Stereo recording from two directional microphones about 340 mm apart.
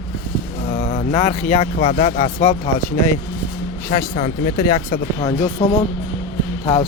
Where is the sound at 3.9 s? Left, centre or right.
Left.